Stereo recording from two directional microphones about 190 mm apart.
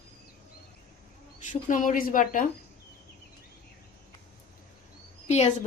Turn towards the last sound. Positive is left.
turn(degrees=35)  # may be behind; listen again after turning